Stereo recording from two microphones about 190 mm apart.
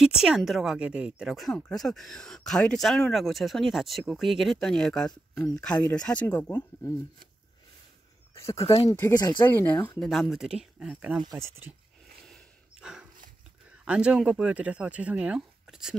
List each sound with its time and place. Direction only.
0.0 s a woman's voice: 5° right (ahead or behind)
8.6 s speech: 30° left (ahead or behind)
9.5 s a woman's voice: 10° left (ahead or behind); by 11.7 s 15° right (ahead or behind)
12.8 s dog: 5° right (ahead or behind)
13.8 s a woman's voice: 5° right (ahead or behind)